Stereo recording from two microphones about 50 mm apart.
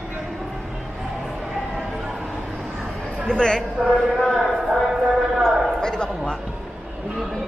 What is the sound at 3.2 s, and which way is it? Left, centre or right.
Speech, centre.